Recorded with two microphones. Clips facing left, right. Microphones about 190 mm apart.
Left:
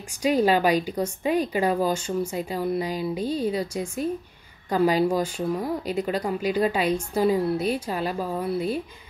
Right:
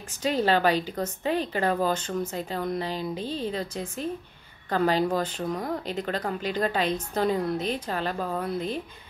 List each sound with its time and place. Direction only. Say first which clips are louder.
0.2 s speech: left 3 dB; 10° left (ahead or behind)